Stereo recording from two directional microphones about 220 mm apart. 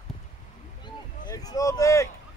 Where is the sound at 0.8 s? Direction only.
20° left (ahead or behind).